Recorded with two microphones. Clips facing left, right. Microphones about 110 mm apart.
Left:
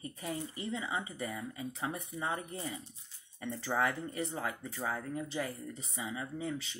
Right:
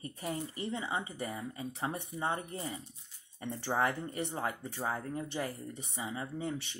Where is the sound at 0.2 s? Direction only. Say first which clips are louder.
Right 2 dB; 30° right (ahead or behind).